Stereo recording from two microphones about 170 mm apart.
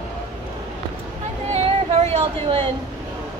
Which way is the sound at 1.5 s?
40° right (ahead or behind).